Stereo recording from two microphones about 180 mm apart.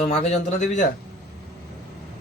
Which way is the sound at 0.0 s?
40° left (ahead or behind).